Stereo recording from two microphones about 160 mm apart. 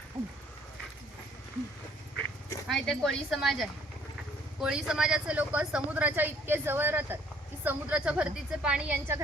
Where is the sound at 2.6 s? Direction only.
Centre (ahead or behind).